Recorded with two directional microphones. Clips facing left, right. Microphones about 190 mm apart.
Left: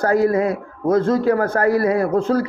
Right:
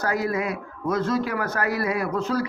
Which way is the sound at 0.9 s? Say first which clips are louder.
Left 8 dB; 50° left (ahead or behind).